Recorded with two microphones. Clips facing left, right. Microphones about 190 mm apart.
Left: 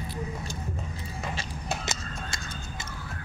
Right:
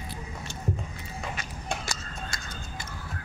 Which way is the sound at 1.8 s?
20° left (ahead or behind).